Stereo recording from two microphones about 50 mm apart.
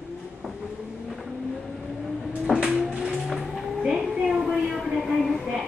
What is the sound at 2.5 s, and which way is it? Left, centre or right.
Sliding door, centre.